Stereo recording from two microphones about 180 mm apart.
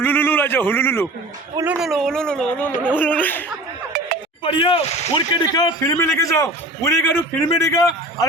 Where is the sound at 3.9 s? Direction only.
60° right (ahead or behind).